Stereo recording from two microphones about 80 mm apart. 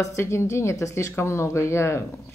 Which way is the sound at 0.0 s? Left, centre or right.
Left.